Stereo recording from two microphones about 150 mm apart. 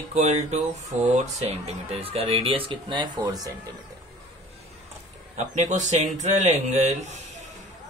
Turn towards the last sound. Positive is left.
turn(degrees=-50)  # may be behind; listen again after turning